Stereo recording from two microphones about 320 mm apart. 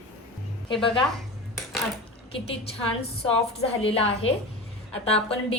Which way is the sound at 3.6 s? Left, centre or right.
Centre.